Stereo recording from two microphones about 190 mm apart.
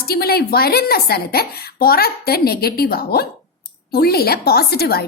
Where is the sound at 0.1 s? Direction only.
55° left (ahead or behind).